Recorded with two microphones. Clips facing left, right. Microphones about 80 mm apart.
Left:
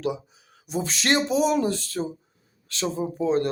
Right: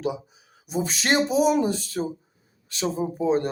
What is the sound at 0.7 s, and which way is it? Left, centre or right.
Speech, centre.